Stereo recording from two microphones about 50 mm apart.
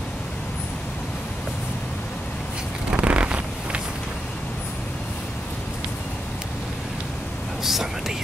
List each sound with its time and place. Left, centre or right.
2.9 s zipper: right
7.6 s whispering: centre